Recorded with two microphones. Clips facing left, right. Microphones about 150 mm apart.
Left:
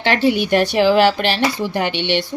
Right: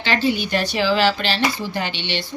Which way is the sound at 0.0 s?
65° left (ahead or behind).